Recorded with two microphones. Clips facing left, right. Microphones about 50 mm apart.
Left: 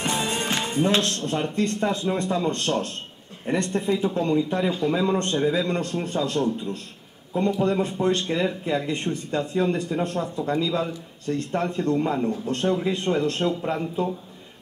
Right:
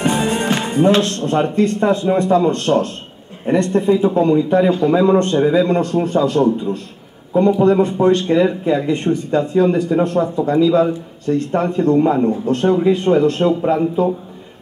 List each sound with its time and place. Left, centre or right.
0.0 s music: right
0.7 s a man's voice: centre
12.4 s a man's voice: centre